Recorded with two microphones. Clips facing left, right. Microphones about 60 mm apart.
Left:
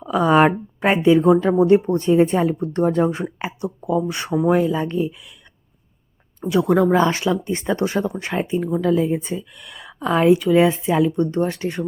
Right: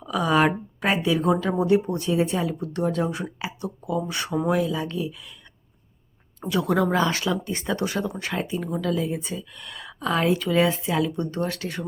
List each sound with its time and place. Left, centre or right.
0.0 s speech: left
6.5 s speech: left
9.6 s speech: centre; by 11.8 s left